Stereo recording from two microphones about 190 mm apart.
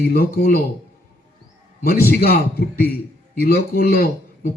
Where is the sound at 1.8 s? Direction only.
50° left (ahead or behind).